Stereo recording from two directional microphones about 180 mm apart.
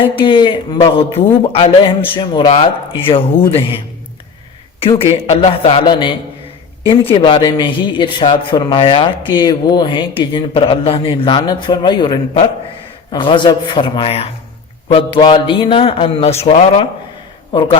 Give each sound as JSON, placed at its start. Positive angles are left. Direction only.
{"t": 0.0, "sound": "a man's voice", "side_deg": 30}
{"t": 4.8, "sound": "a man's voice", "side_deg": 30}